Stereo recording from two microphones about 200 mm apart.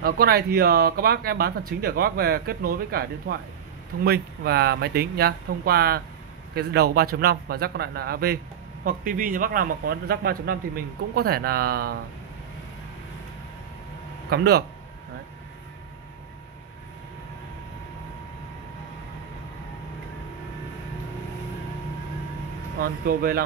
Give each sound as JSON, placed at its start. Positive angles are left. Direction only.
{"t": 0.0, "sound": "speech", "side_deg": -50}
{"t": 14.3, "sound": "speech", "side_deg": -55}
{"t": 22.8, "sound": "speech", "side_deg": -50}